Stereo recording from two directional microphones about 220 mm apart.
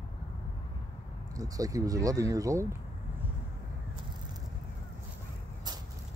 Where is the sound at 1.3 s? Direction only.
15° right (ahead or behind).